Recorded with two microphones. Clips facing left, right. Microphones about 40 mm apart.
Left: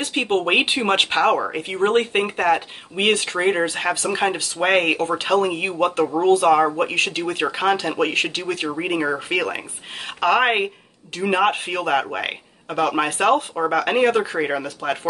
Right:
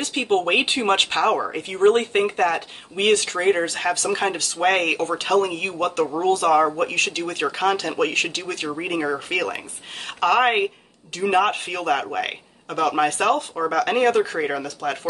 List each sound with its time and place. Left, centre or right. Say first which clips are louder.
0.0 s a woman's voice: even; left